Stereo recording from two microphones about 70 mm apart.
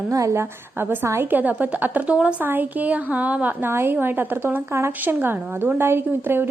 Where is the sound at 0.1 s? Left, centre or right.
Right.